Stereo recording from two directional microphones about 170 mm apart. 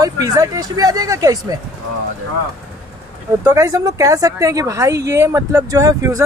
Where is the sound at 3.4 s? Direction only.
20° right (ahead or behind).